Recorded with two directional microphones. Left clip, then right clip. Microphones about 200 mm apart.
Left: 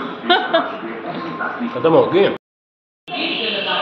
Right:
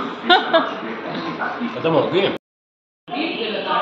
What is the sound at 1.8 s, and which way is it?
Speech, 60° left (ahead or behind).